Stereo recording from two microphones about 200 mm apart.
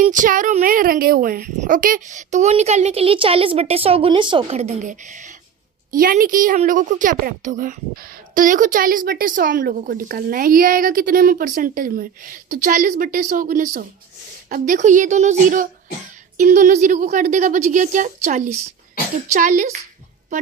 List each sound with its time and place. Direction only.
0.0 s a woman's voice: 40° right (ahead or behind)